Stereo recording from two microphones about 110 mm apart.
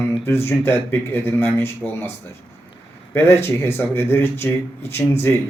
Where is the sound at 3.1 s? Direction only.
20° left (ahead or behind).